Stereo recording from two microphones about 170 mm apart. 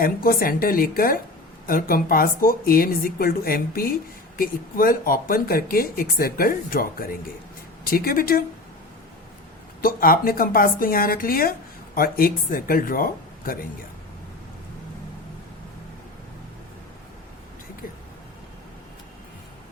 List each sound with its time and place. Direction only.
0.0 s speech: 60° left (ahead or behind)
9.8 s speech: 55° left (ahead or behind)